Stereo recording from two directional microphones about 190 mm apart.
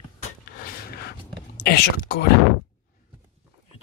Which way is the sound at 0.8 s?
55° left (ahead or behind).